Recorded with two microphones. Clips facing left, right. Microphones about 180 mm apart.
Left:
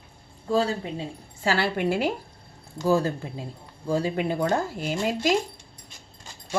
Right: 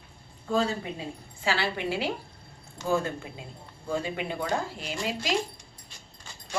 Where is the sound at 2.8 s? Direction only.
35° left (ahead or behind).